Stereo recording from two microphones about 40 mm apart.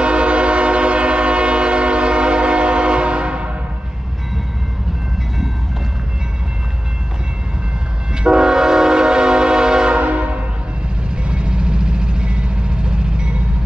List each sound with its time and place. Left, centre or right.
0.0 s train: right
8.2 s train horn: centre
9.9 s train horn: right
11.2 s vehicle: right